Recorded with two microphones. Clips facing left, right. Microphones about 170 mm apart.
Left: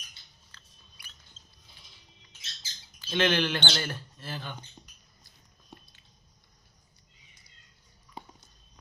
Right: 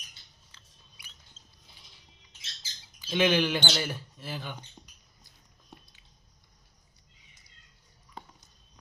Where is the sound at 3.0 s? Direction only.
10° right (ahead or behind).